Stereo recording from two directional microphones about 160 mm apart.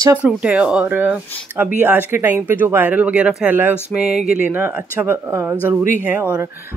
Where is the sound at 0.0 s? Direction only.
10° right (ahead or behind).